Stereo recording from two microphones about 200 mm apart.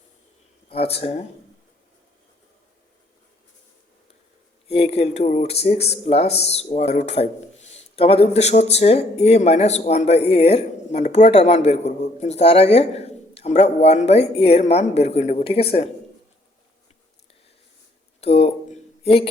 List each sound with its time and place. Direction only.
0.7 s speech: 30° left (ahead or behind)
4.7 s speech: 30° left (ahead or behind)
18.2 s a sound: 30° left (ahead or behind)